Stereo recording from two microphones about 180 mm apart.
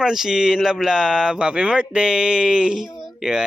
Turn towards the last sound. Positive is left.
turn(degrees=0)  # may be behind; listen again after turning